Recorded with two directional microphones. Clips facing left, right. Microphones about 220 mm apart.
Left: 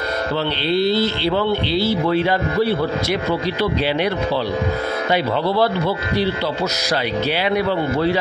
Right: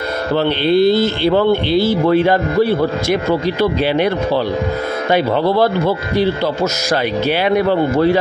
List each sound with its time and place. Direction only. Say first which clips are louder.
0.4 s a man's voice: right 7 dB; 50° right (ahead or behind)
5.1 s a man's voice: right 5 dB; 50° right (ahead or behind)